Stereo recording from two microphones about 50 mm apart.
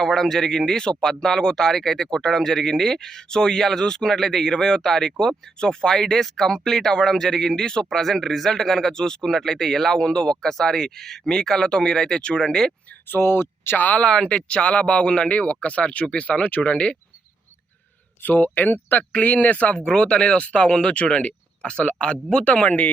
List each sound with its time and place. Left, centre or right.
0.0 s speech: centre
13.1 s speech: left
13.7 s speech: left
14.0 s speech: centre
18.2 s speech: left
19.9 s speech: centre